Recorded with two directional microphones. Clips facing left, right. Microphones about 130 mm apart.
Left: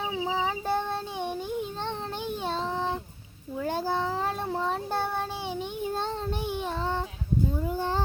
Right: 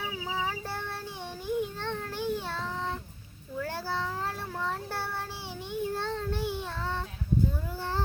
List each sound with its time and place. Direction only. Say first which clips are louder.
0.3 s child singing: left 6 dB; 20° left (ahead or behind)
7.8 s cat: left 3 dB; 20° left (ahead or behind)